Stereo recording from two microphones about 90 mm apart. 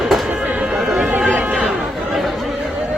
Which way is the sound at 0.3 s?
15° right (ahead or behind).